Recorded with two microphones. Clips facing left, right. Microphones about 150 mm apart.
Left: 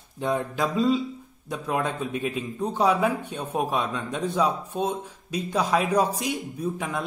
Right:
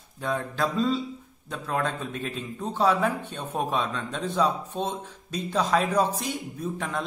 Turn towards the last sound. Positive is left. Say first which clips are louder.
# left 2 dB
turn(degrees=10)  # may be behind; listen again after turning